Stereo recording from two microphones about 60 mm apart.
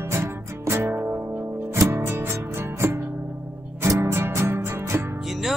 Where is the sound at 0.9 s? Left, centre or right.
Right.